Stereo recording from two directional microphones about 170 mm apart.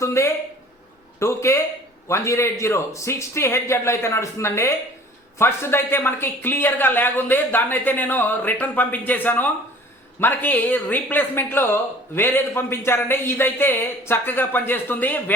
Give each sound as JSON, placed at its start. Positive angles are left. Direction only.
{"t": 0.0, "sound": "speech", "side_deg": 15}